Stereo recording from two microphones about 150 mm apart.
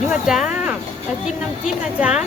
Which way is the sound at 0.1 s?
5° right (ahead or behind).